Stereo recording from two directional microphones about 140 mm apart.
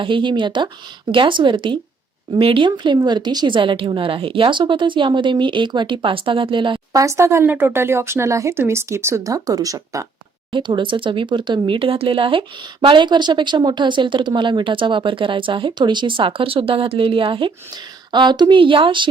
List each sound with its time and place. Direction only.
0.0 s speech: 35° right (ahead or behind)
6.9 s speech: 20° right (ahead or behind)
10.5 s speech: 35° right (ahead or behind)